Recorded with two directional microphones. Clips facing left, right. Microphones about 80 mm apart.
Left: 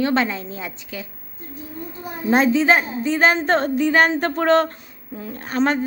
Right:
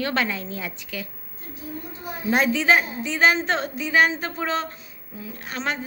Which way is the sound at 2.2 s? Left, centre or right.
Left.